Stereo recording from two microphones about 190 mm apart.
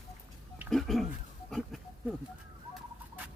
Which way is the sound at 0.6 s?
Centre (ahead or behind).